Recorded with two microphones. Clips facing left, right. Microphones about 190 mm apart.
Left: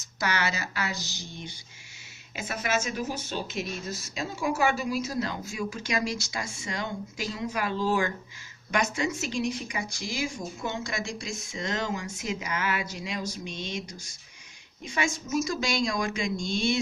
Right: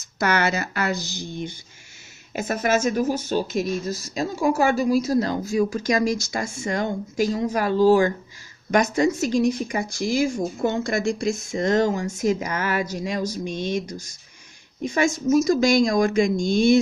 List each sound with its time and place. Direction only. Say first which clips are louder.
0.2 s speech: right 8 dB; 55° right (ahead or behind)
2.3 s speech: right 8 dB; 45° right (ahead or behind)